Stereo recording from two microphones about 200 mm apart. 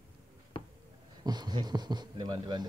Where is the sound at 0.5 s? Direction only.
25° left (ahead or behind).